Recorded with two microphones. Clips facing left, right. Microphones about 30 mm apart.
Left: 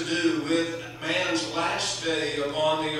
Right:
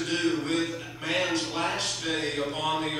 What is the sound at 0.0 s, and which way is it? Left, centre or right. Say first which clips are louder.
A man's voice: left 2 dB; centre.